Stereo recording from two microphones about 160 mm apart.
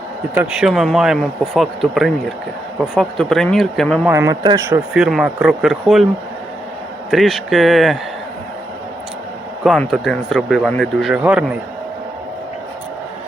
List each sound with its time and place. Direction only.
0.3 s speech: 5° right (ahead or behind)
4.1 s speech: 20° right (ahead or behind)
4.9 s speech: 5° right (ahead or behind)
7.1 s speech: centre (ahead or behind)
9.9 s speech: centre (ahead or behind)